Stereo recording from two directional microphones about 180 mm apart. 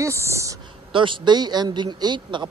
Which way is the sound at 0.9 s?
25° right (ahead or behind).